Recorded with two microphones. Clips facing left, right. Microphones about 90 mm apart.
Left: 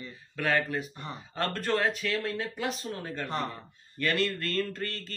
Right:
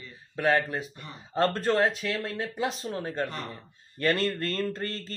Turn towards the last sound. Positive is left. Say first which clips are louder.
# right 4 dB
turn(degrees=-30)  # may be behind; listen again after turning